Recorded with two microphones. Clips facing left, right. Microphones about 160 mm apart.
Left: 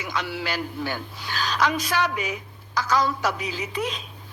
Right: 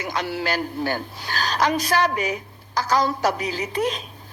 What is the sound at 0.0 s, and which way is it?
A man's voice, 40° right (ahead or behind).